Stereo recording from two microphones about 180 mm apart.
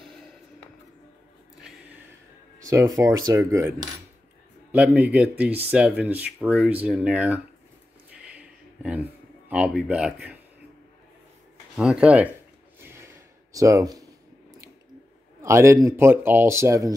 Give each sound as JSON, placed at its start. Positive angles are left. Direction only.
{"t": 0.0, "sound": "music", "side_deg": 5}
{"t": 2.6, "sound": "a man's voice", "side_deg": -20}
{"t": 4.7, "sound": "a man's voice", "side_deg": -10}
{"t": 8.2, "sound": "a sound", "side_deg": -5}
{"t": 9.5, "sound": "a man's voice", "side_deg": -5}
{"t": 11.7, "sound": "speech", "side_deg": -5}
{"t": 12.8, "sound": "a sound", "side_deg": -15}
{"t": 15.4, "sound": "a man's voice", "side_deg": -15}